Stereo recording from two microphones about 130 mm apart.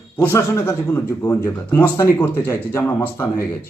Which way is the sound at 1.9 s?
25° left (ahead or behind).